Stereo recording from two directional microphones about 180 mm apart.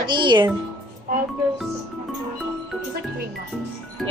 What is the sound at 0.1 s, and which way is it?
Speech, 25° right (ahead or behind).